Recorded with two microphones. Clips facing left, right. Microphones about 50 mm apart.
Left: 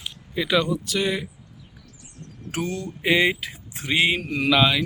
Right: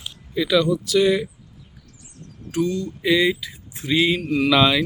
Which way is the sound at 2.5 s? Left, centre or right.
Left.